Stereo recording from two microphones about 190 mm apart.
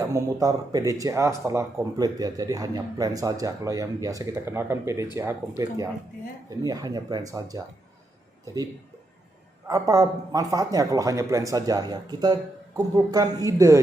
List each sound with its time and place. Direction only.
0.0 s a man's voice: 15° right (ahead or behind)
9.6 s a man's voice: 20° right (ahead or behind)